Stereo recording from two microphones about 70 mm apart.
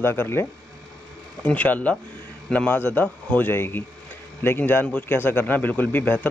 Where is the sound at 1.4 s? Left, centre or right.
Left.